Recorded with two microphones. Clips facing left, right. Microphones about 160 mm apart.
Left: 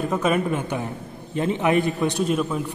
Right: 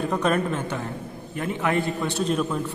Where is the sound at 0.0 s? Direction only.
5° left (ahead or behind).